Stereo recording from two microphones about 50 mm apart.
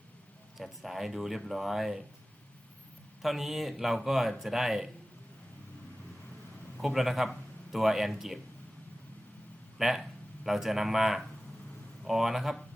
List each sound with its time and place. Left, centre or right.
0.5 s speech: centre
3.2 s speech: centre
6.7 s a man's voice: centre
9.7 s speech: centre